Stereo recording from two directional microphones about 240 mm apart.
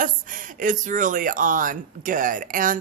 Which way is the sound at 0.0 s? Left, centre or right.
Right.